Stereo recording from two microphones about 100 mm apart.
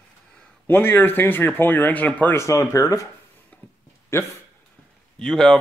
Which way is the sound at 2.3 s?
30° left (ahead or behind).